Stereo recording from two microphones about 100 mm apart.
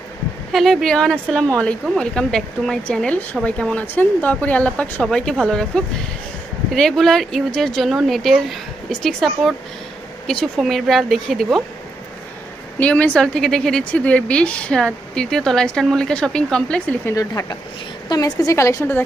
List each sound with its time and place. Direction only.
0.5 s speech: centre (ahead or behind)
12.8 s speech: 15° left (ahead or behind)
17.1 s a woman's voice: 35° left (ahead or behind)